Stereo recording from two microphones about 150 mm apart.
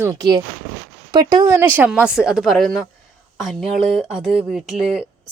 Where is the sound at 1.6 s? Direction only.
15° right (ahead or behind).